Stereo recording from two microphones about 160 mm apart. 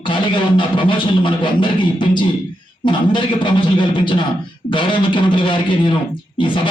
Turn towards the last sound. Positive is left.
turn(degrees=30)  # may be behind; listen again after turning